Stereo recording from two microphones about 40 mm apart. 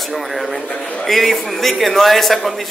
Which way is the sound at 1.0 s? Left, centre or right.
Centre.